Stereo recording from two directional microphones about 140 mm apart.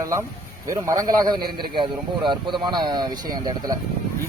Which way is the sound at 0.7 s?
25° right (ahead or behind).